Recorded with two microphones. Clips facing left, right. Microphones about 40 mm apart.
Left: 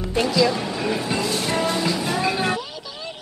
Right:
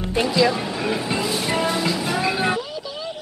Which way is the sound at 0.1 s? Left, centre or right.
Centre.